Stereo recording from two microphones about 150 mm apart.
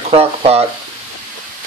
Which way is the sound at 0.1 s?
40° right (ahead or behind).